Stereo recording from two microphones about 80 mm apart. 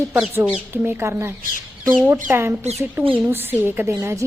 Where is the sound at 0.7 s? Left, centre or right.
Right.